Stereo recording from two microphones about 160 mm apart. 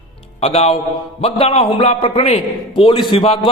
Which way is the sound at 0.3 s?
40° left (ahead or behind).